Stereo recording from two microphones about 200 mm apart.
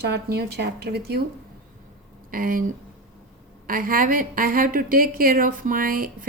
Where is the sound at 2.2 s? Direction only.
45° right (ahead or behind).